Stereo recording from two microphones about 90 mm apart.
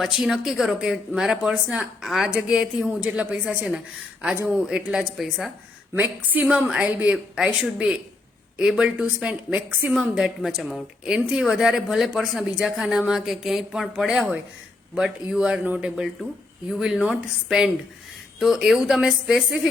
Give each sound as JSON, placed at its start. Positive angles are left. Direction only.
{"t": 0.0, "sound": "speech", "side_deg": -5}
{"t": 1.6, "sound": "a woman's voice", "side_deg": -15}
{"t": 2.0, "sound": "a woman's voice", "side_deg": -5}
{"t": 5.9, "sound": "a woman's voice", "side_deg": -20}
{"t": 16.6, "sound": "a woman's voice", "side_deg": -5}